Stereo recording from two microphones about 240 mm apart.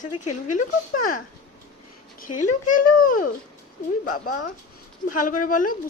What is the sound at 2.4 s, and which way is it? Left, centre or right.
Speech, left.